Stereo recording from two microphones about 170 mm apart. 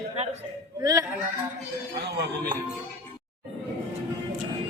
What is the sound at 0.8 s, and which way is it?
Speech, 20° right (ahead or behind).